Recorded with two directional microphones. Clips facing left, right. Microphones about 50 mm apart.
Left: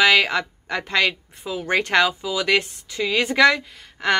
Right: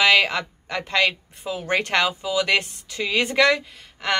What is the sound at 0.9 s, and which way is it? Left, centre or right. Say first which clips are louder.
Speech: even; centre.